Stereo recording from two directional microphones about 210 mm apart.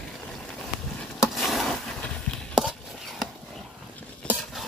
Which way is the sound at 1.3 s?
Centre (ahead or behind).